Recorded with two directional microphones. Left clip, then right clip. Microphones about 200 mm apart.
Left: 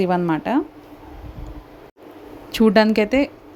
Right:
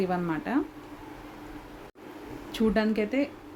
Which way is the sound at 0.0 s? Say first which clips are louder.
Left 9 dB; 40° left (ahead or behind).